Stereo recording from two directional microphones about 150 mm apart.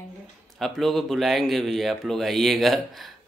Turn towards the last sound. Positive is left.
turn(degrees=0)  # may be behind; listen again after turning